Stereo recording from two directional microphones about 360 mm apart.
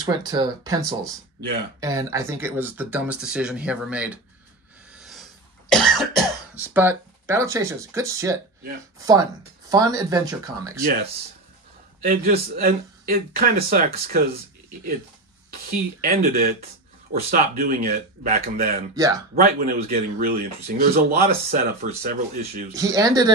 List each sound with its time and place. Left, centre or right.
0.0 s speech: centre
4.9 s cough: centre
9.7 s speech: centre
10.9 s speech: right
15.5 s speech: right
18.9 s speech: centre
19.9 s speech: right
22.8 s speech: centre